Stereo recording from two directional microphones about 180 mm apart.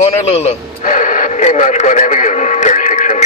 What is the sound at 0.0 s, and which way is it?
Radio, 35° left (ahead or behind).